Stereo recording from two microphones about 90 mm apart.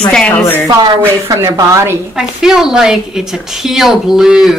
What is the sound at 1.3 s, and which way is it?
Speech, 35° right (ahead or behind).